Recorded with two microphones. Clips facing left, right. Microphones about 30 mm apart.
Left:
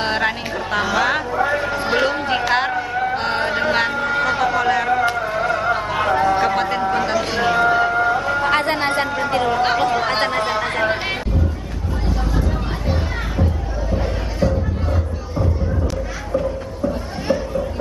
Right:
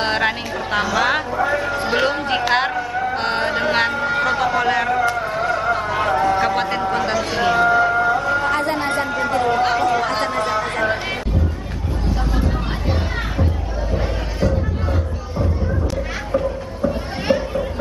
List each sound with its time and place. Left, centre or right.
0.0 s speech: centre
1.3 s a man's voice: centre
2.7 s music: centre
3.2 s vehicle: centre
5.1 s music: centre
6.4 s music: centre
8.5 s a sound: left
9.6 s chatter: centre
10.0 s chatter: left
10.7 s music: centre
12.4 s music: centre
17.3 s chatter: right